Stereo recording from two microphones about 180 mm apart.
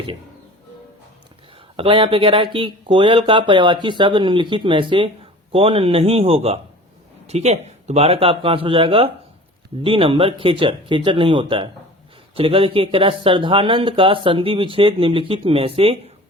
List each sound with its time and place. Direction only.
1.7 s speech: 30° right (ahead or behind)